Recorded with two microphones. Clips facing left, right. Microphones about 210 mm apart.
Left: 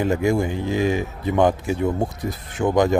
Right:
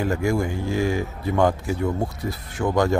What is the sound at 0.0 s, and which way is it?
A man's voice, 20° left (ahead or behind).